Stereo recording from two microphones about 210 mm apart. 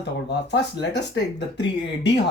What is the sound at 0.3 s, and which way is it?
Speech, 55° left (ahead or behind).